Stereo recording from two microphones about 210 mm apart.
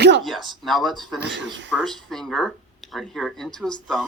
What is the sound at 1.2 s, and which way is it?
Speech, 60° right (ahead or behind).